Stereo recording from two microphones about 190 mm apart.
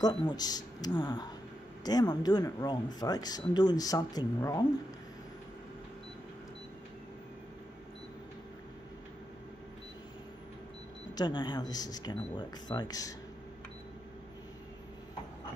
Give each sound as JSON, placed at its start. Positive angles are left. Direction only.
{"t": 0.0, "sound": "speech", "side_deg": 25}
{"t": 11.1, "sound": "speech", "side_deg": 20}